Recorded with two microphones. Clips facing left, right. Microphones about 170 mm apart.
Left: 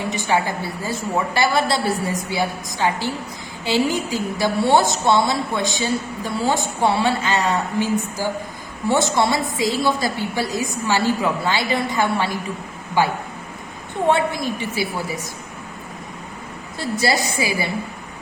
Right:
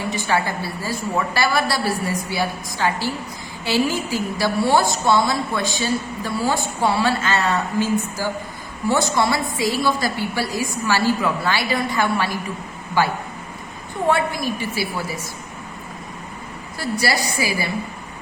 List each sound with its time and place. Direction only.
0.1 s a woman's voice: 20° left (ahead or behind)
8.9 s a woman's voice: 25° left (ahead or behind)
16.7 s a woman's voice: 25° left (ahead or behind)